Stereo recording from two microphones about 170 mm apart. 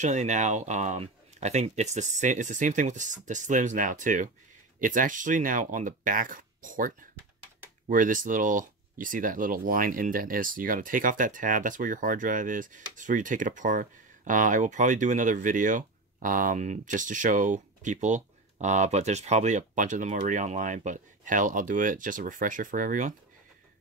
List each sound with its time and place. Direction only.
0.0 s speech: 45° right (ahead or behind)